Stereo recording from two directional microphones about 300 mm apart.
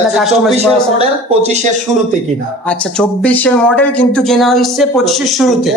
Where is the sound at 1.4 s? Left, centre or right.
Right.